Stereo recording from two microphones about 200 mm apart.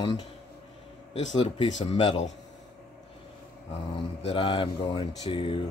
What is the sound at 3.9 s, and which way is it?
Speech, 25° left (ahead or behind).